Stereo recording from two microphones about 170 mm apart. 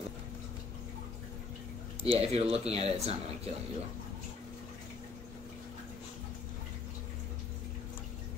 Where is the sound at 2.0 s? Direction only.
35° right (ahead or behind).